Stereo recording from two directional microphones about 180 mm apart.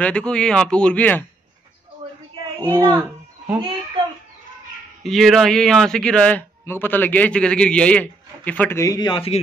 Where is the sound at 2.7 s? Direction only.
20° right (ahead or behind).